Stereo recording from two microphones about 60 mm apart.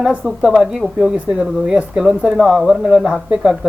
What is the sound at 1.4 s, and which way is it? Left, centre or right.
Speech, centre.